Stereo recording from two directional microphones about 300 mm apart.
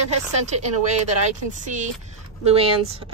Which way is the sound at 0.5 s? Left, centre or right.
Right.